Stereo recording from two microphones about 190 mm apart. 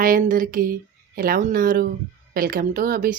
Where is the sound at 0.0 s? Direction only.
45° right (ahead or behind).